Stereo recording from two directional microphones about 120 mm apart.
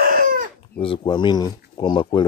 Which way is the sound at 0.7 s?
45° left (ahead or behind).